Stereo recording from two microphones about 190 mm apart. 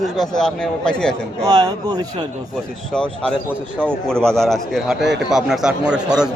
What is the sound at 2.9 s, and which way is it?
A man's voice, 5° left (ahead or behind).